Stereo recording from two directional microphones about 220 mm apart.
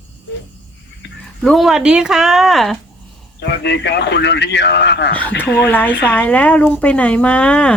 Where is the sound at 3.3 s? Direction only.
50° left (ahead or behind).